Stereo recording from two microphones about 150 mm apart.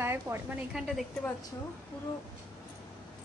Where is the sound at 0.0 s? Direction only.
15° right (ahead or behind).